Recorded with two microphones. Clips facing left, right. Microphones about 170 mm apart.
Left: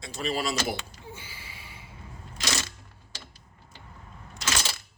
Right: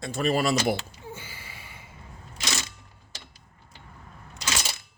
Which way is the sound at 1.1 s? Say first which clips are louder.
Right 2 dB; 50° right (ahead or behind).